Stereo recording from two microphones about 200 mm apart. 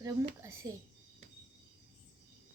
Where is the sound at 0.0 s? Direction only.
15° right (ahead or behind).